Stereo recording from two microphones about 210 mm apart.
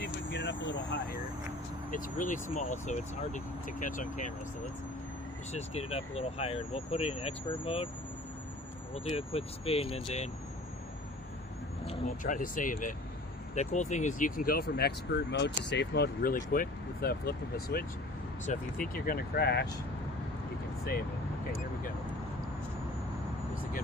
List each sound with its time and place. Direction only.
0.0 s vehicle: 55° left (ahead or behind)
1.9 s speech: 40° left (ahead or behind)
5.5 s speech: 30° left (ahead or behind)
9.1 s speech: 30° left (ahead or behind)
11.9 s speech: 35° left (ahead or behind)
18.9 s speech: 45° left (ahead or behind)